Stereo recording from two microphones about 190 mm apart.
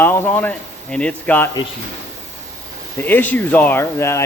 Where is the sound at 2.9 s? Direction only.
10° left (ahead or behind).